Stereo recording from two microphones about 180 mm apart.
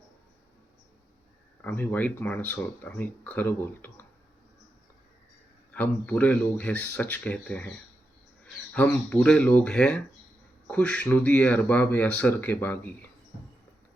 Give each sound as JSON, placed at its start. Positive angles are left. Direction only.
{"t": 1.6, "sound": "speech", "side_deg": 10}
{"t": 5.7, "sound": "speech", "side_deg": 10}
{"t": 8.7, "sound": "speech", "side_deg": 10}